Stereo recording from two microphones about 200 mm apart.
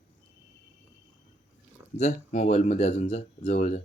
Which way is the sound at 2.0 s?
35° left (ahead or behind).